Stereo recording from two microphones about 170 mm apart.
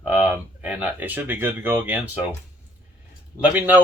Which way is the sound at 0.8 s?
10° right (ahead or behind).